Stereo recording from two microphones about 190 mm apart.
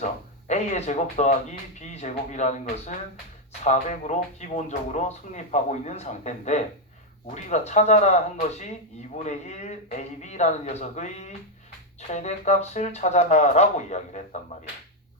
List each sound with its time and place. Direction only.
0.0 s speech: 40° left (ahead or behind)